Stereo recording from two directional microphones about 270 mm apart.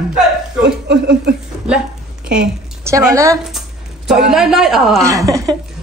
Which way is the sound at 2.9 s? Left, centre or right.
Centre.